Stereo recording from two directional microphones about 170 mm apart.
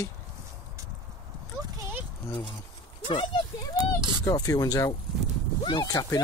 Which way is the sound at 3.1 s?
30° left (ahead or behind).